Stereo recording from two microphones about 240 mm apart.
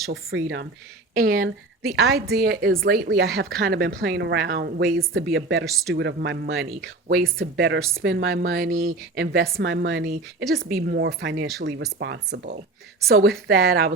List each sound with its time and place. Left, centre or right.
0.1 s speech: right
1.2 s a woman's voice: right